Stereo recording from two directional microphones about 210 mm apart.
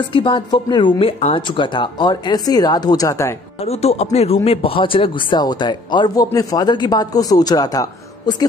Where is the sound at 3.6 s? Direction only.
30° left (ahead or behind).